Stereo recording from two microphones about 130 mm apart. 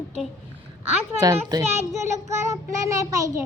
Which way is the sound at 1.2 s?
30° right (ahead or behind).